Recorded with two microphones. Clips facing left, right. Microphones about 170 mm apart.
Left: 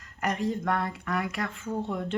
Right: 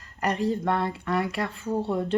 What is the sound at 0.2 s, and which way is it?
Speech, 30° right (ahead or behind).